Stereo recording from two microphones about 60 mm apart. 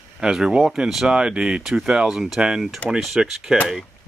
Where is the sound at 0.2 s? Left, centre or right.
Centre.